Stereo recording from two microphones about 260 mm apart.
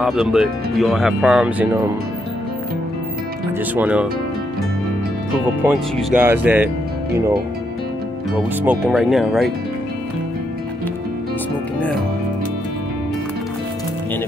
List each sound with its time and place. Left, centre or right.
0.0 s speech: centre
3.7 s speech: centre
5.6 s speech: centre
8.6 s speech: centre